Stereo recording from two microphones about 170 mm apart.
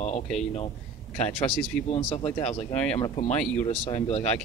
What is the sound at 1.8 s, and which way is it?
Speech, 35° left (ahead or behind).